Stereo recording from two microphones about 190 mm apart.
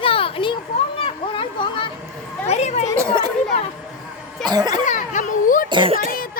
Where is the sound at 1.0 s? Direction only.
25° left (ahead or behind).